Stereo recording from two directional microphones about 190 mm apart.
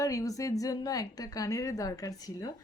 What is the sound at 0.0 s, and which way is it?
A woman's voice, 15° left (ahead or behind).